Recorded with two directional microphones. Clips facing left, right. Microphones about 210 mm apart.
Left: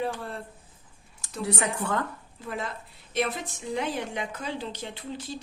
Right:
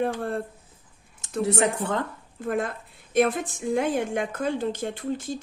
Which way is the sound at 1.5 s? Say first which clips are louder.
Right 4 dB; 20° right (ahead or behind).